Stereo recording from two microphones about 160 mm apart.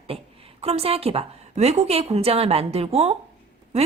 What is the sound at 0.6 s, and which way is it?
A woman's voice, 40° right (ahead or behind).